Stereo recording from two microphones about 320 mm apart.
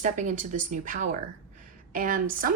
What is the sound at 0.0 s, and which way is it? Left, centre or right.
A woman's voice, right.